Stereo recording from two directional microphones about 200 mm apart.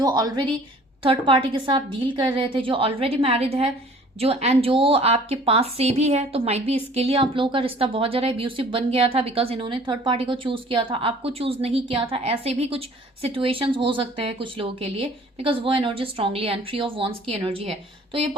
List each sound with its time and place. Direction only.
0.0 s a woman's voice: 20° right (ahead or behind)